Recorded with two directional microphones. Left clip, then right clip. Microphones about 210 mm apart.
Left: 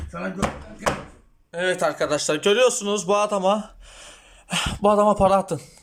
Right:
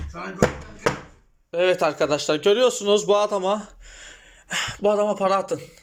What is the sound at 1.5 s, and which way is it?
Speech, centre (ahead or behind).